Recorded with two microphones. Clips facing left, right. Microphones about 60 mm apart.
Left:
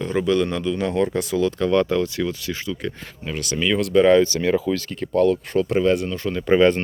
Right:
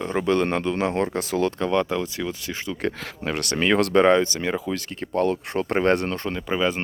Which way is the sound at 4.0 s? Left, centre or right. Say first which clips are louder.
Left 3 dB; right.